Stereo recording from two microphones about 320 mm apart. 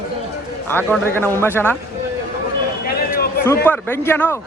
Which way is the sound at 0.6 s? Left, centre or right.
Centre.